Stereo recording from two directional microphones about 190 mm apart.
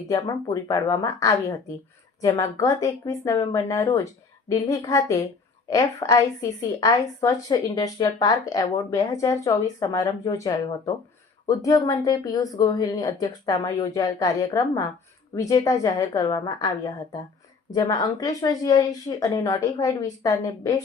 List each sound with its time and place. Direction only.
0.1 s speech: 15° left (ahead or behind)